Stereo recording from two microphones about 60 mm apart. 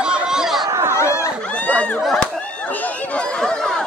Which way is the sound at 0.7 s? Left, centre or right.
Right.